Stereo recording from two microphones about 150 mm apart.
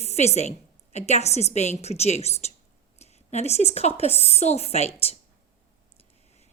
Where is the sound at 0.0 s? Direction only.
45° left (ahead or behind).